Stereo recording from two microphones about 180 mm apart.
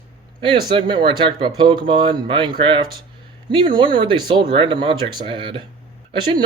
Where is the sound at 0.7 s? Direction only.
25° right (ahead or behind).